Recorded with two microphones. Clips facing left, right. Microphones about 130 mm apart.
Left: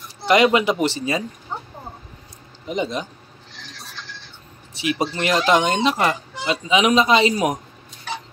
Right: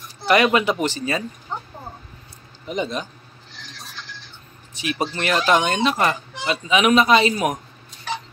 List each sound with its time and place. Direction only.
0.3 s speech: 20° left (ahead or behind)
2.6 s speech: 20° left (ahead or behind)
4.8 s speech: 15° left (ahead or behind)